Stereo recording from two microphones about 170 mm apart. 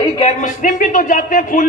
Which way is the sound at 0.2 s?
45° left (ahead or behind).